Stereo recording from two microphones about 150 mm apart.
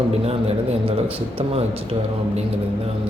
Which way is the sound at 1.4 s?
40° right (ahead or behind).